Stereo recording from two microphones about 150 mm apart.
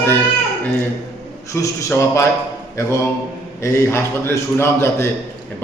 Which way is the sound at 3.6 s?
15° left (ahead or behind).